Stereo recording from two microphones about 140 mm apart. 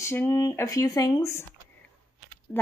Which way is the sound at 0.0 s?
20° left (ahead or behind).